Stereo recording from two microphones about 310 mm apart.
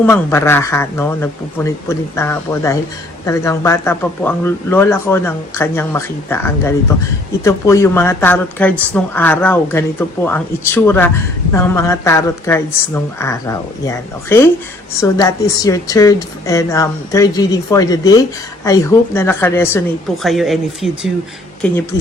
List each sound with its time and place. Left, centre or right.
0.0 s a woman's voice: centre